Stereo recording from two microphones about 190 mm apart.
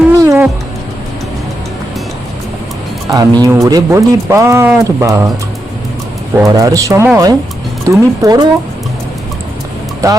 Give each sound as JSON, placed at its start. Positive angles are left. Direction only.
{"t": 0.2, "sound": "music", "side_deg": -15}
{"t": 3.1, "sound": "speech", "side_deg": -20}
{"t": 6.3, "sound": "speech", "side_deg": -20}
{"t": 10.0, "sound": "speech", "side_deg": -15}